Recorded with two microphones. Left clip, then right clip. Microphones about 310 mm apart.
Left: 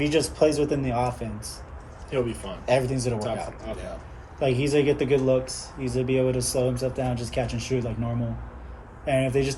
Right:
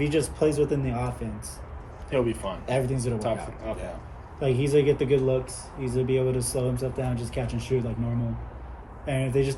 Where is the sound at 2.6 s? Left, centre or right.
Centre.